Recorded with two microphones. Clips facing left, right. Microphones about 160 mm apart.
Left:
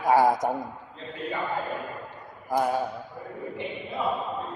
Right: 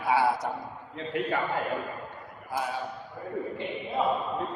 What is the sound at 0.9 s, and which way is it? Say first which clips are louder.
Speech: right 5 dB; 75° right (ahead or behind).